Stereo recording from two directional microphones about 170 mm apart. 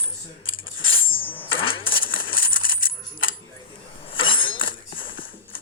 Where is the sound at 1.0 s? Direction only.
30° left (ahead or behind).